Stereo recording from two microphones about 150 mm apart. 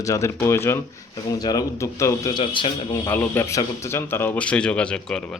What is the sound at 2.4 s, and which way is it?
Speech, 35° left (ahead or behind).